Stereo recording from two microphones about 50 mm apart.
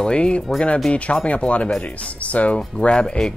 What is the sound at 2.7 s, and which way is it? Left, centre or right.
Speech, centre.